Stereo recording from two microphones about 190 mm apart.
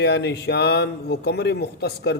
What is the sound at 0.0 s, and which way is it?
Speech, 60° left (ahead or behind).